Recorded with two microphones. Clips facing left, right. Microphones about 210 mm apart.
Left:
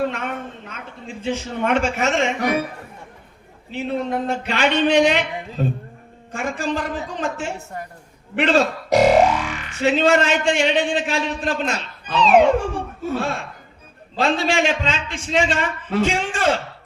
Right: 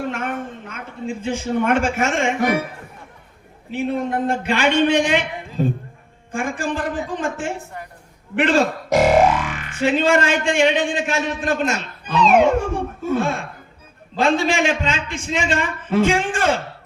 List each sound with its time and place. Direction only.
0.1 s speech: 50° right (ahead or behind)
3.7 s speech: 50° right (ahead or behind)
6.3 s a sound: 50° right (ahead or behind)
8.4 s speech: 50° right (ahead or behind)